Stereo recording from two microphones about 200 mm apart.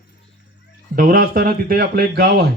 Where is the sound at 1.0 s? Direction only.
45° right (ahead or behind).